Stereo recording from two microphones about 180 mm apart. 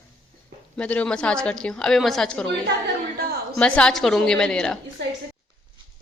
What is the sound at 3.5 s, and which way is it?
A woman's voice, 5° left (ahead or behind).